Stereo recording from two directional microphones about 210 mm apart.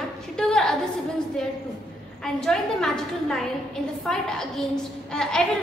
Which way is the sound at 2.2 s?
5° left (ahead or behind).